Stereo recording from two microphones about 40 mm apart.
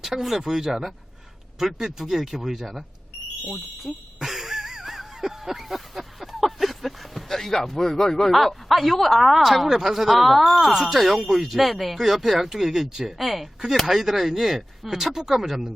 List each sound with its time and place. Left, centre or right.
0.0 s speech: centre
10.7 s speech: centre